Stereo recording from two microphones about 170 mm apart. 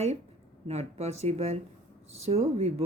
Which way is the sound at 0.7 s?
40° right (ahead or behind).